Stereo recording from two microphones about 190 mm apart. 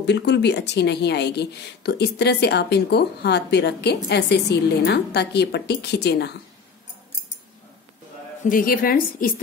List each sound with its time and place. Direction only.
0.0 s speech: 65° left (ahead or behind)
8.5 s a woman's voice: 45° left (ahead or behind)